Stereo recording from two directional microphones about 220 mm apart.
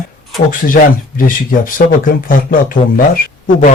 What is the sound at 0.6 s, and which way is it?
Speech, 35° left (ahead or behind).